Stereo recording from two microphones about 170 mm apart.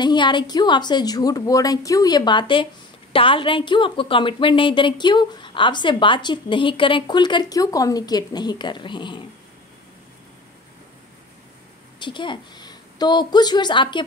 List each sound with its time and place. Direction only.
0.0 s a woman's voice: 25° left (ahead or behind)
12.0 s a woman's voice: 30° left (ahead or behind)